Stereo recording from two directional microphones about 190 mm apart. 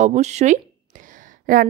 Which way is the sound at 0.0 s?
35° right (ahead or behind).